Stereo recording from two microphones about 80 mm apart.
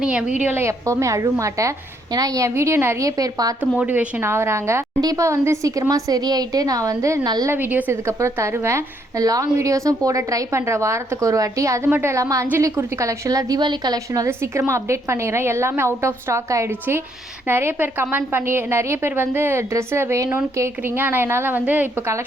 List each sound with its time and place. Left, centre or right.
0.0 s a woman's voice: centre
0.4 s a woman's voice: right
0.7 s a woman's voice: right
3.8 s a woman's voice: centre
4.2 s a woman's voice: right
4.9 s a woman's voice: right
7.5 s a woman's voice: right
8.0 s a woman's voice: right
9.1 s a woman's voice: right
11.9 s a woman's voice: right
13.6 s a woman's voice: right
14.3 s a woman's voice: right
17.4 s a woman's voice: right